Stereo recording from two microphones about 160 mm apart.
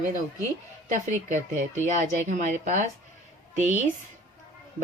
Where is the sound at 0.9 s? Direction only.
50° right (ahead or behind).